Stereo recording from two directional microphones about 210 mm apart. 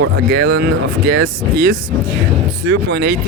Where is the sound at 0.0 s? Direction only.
55° right (ahead or behind).